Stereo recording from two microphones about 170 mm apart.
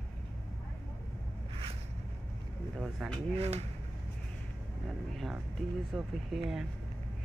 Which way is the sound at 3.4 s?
40° right (ahead or behind).